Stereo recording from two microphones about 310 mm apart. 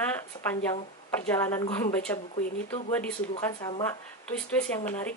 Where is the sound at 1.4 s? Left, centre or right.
Centre.